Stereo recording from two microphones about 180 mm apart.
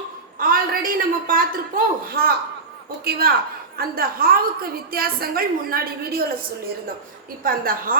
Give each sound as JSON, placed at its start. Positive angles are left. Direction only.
{"t": 0.3, "sound": "a woman's voice", "side_deg": -55}
{"t": 7.4, "sound": "a woman's voice", "side_deg": -55}